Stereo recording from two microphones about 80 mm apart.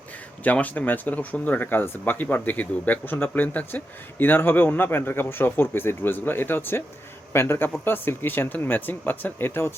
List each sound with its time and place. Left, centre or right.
0.4 s a man's voice: centre